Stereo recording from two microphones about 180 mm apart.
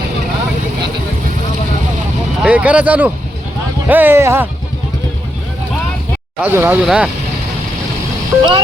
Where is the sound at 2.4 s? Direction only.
5° right (ahead or behind).